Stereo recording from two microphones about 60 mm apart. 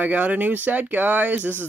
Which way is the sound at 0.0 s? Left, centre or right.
Right.